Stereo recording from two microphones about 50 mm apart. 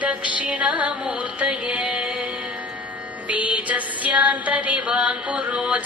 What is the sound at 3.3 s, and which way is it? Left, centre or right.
Music, right.